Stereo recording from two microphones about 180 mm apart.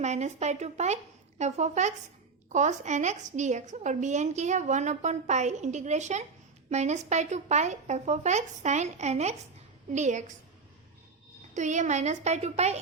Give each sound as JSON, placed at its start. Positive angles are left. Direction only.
{"t": 0.0, "sound": "a woman's voice", "side_deg": -40}
{"t": 11.5, "sound": "a woman's voice", "side_deg": -40}